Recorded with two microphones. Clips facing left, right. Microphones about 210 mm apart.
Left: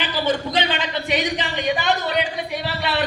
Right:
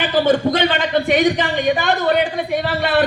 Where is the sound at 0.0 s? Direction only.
50° right (ahead or behind).